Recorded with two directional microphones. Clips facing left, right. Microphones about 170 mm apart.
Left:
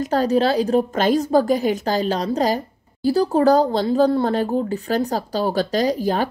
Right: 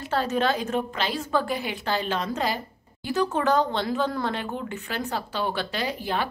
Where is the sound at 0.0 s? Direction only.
40° left (ahead or behind).